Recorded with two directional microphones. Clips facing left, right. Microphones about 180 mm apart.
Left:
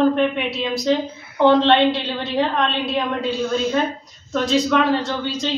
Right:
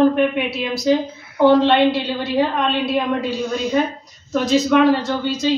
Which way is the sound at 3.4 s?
15° right (ahead or behind).